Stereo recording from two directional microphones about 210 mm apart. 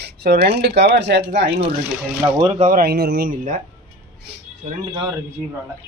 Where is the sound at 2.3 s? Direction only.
30° right (ahead or behind); by 3.5 s 45° right (ahead or behind).